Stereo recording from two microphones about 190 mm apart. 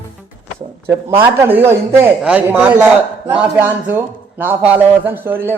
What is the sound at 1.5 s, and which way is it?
A man's voice, 10° right (ahead or behind).